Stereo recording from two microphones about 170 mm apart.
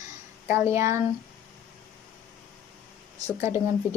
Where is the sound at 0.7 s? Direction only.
15° right (ahead or behind).